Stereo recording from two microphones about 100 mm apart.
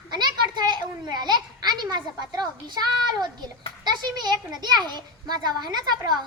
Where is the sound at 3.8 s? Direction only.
45° right (ahead or behind).